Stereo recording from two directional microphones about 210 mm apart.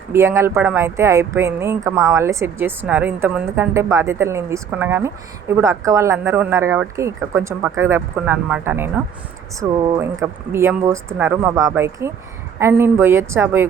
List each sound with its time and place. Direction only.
0.1 s a woman's voice: 15° right (ahead or behind)